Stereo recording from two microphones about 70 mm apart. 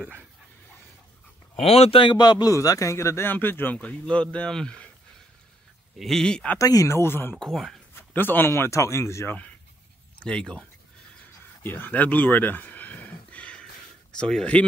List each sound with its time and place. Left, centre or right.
2.0 s a man's voice: left
2.5 s speech: left
3.7 s speech: centre
5.9 s speech: centre
6.6 s speech: left
7.3 s speech: centre
8.1 s speech: left
10.1 s speech: centre
11.6 s a sound: left
14.1 s speech: centre